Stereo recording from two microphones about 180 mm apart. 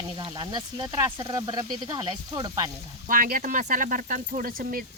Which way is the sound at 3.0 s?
50° right (ahead or behind).